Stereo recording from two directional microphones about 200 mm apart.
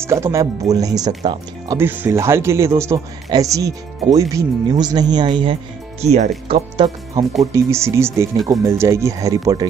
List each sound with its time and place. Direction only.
0.0 s speech: 15° right (ahead or behind)
1.8 s speech: 10° right (ahead or behind); by 7.2 s 25° right (ahead or behind)
7.5 s speech: 15° right (ahead or behind)